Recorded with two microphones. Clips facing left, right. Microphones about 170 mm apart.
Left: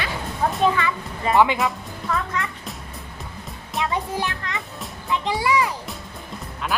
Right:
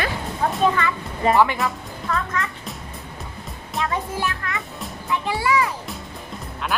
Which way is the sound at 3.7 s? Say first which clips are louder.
Left 1 dB; 20° left (ahead or behind).